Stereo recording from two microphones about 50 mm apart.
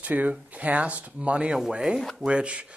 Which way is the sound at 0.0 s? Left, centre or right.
Right.